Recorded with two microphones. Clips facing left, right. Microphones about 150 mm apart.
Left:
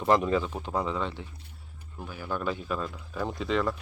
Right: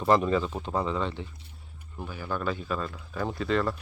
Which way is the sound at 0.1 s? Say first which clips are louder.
Right 1 dB; 10° left (ahead or behind).